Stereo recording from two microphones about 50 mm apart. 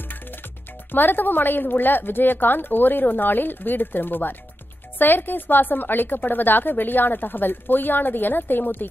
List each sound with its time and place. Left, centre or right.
0.9 s a woman's voice: left